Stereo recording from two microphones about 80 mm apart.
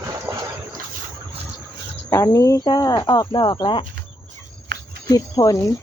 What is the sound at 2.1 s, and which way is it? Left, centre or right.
Speech, left.